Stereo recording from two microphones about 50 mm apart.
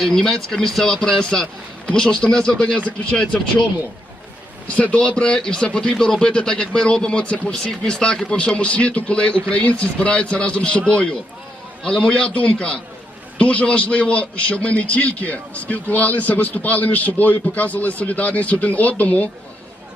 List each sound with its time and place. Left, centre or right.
0.0 s speech: centre
4.8 s a man's voice: left